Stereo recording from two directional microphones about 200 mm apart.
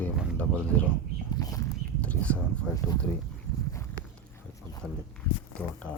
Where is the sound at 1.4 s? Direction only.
20° left (ahead or behind).